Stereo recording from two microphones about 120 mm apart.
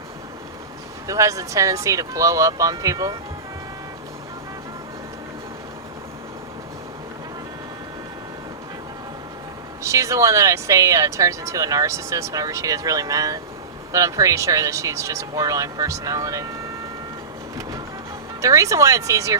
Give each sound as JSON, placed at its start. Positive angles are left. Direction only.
{"t": 1.0, "sound": "speech", "side_deg": -25}
{"t": 9.8, "sound": "speech", "side_deg": -25}
{"t": 18.4, "sound": "speech", "side_deg": -25}